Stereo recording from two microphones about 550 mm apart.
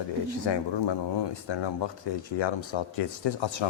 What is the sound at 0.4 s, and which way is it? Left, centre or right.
Speech, left.